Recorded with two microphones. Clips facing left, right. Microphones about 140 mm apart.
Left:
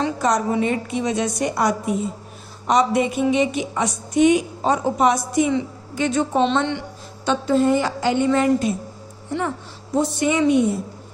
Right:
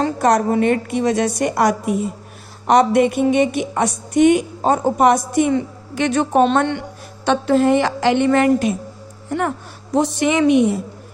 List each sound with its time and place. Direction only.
0.0 s a woman's voice: 55° right (ahead or behind)
6.4 s speech: 50° right (ahead or behind)
7.2 s a woman's voice: 70° right (ahead or behind)
9.9 s a woman's voice: 75° right (ahead or behind)